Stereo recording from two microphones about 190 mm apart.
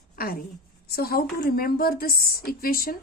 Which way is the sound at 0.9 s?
55° left (ahead or behind).